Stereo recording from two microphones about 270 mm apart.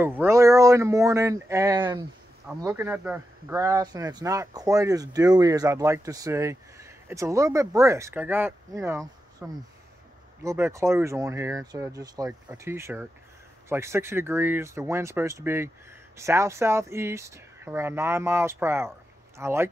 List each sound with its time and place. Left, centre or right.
0.0 s speech: centre